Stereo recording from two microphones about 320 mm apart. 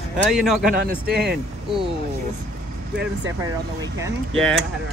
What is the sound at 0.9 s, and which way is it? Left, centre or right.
Speech, right.